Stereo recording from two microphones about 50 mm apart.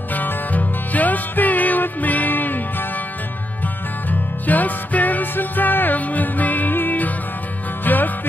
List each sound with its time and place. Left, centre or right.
0.1 s music: left
4.1 s music: left